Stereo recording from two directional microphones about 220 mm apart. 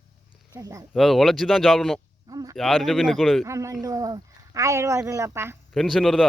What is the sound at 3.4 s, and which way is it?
Speech, 15° right (ahead or behind).